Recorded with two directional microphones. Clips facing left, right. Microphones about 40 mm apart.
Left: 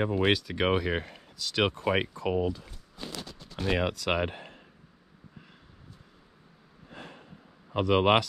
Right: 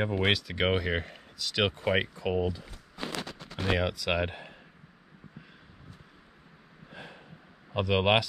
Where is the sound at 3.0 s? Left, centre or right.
Right.